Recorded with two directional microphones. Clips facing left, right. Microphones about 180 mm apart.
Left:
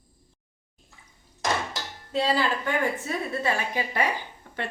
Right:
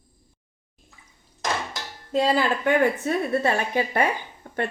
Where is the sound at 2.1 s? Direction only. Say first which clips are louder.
Right 3 dB; 45° right (ahead or behind).